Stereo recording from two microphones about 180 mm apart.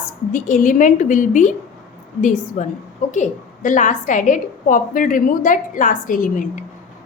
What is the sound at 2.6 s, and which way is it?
A woman's voice, 45° left (ahead or behind).